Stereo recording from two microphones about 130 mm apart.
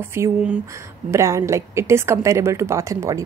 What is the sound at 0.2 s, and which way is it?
A woman's voice, 20° right (ahead or behind).